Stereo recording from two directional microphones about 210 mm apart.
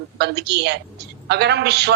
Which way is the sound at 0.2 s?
50° right (ahead or behind).